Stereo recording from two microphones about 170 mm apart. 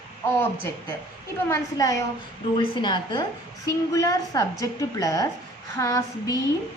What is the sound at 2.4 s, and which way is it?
A woman's voice, 30° left (ahead or behind).